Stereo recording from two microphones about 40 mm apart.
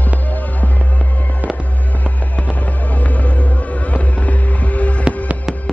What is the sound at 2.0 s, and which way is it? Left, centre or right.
Music, left.